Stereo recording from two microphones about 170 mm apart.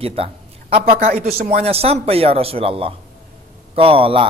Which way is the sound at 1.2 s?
65° right (ahead or behind).